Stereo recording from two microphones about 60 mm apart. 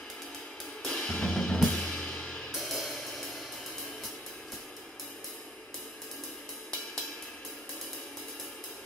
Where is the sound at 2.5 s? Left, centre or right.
Centre.